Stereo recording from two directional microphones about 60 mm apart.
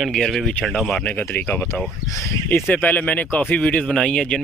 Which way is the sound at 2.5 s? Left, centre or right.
Left.